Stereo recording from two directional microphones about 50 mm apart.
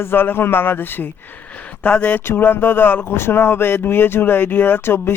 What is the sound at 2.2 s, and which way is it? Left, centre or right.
Speech, left.